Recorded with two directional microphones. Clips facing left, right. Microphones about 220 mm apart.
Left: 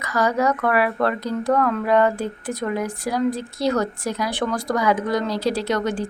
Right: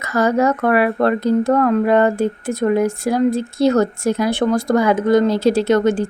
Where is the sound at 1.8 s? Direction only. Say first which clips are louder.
Right 4 dB; 50° right (ahead or behind).